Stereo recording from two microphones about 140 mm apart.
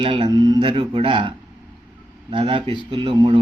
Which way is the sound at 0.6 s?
35° right (ahead or behind).